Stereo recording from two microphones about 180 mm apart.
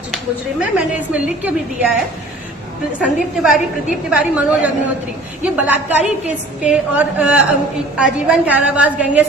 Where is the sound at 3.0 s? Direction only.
Centre (ahead or behind).